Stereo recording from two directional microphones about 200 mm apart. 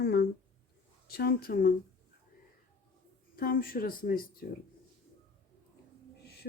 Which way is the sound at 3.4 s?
45° left (ahead or behind).